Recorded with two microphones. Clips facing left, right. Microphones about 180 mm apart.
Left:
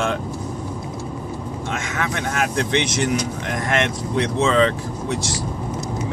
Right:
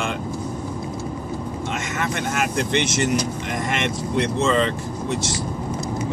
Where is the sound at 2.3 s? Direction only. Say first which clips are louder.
Left 2 dB; 5° right (ahead or behind).